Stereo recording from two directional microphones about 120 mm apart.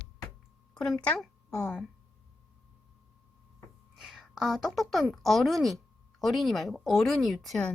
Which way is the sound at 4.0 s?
5° right (ahead or behind).